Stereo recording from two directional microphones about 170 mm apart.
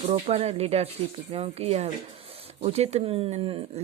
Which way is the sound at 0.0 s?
35° right (ahead or behind).